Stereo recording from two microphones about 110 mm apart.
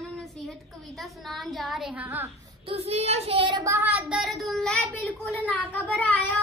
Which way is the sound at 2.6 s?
65° right (ahead or behind).